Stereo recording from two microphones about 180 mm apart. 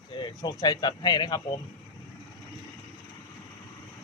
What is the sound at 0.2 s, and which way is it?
Speech, 20° left (ahead or behind).